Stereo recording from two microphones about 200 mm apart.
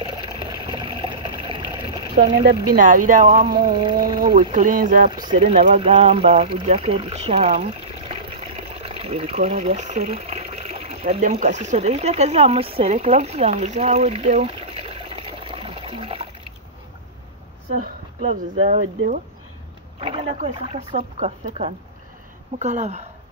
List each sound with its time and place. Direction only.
0.1 s a sound: 20° right (ahead or behind)
2.7 s speech: 40° right (ahead or behind)
3.5 s speech: 25° right (ahead or behind)
4.5 s speech: 40° right (ahead or behind)
5.1 s speech: 20° right (ahead or behind)
5.4 s speech: 35° right (ahead or behind)
17.7 s speech: 45° right (ahead or behind)
20.0 s speech: 35° right (ahead or behind)